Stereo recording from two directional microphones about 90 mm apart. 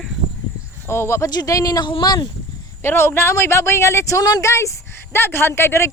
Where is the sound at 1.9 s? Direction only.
60° left (ahead or behind).